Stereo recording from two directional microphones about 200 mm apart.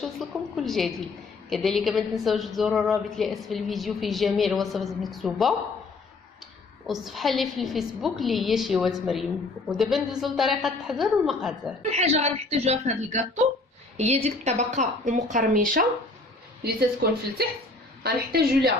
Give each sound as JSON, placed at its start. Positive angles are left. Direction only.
{"t": 0.0, "sound": "a woman's voice", "side_deg": 0}
{"t": 6.8, "sound": "a woman's voice", "side_deg": 0}
{"t": 11.9, "sound": "speech", "side_deg": -35}